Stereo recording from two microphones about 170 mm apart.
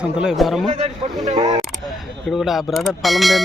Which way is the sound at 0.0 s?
5° right (ahead or behind).